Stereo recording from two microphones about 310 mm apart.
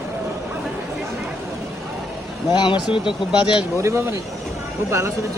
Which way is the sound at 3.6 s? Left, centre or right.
Centre.